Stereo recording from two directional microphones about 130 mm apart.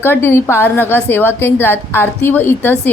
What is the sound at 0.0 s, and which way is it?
Speech, 15° left (ahead or behind).